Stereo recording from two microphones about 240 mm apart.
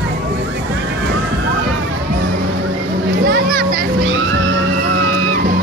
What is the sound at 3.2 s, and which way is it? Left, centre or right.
Children playing, right.